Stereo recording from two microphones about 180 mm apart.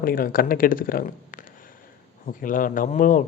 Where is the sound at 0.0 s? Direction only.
55° left (ahead or behind).